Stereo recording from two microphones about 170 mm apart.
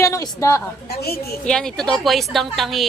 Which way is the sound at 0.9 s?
65° left (ahead or behind).